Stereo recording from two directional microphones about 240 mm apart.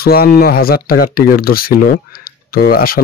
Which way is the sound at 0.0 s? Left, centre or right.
Left.